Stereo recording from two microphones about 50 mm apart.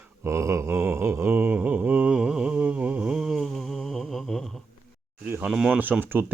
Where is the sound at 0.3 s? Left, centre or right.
Right.